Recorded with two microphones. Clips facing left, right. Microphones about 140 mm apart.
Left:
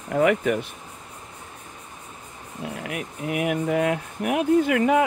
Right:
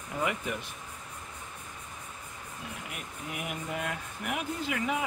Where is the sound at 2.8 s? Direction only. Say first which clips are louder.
Left 11 dB; 80° left.